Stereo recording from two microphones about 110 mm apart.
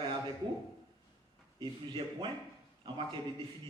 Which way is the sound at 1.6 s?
50° right (ahead or behind).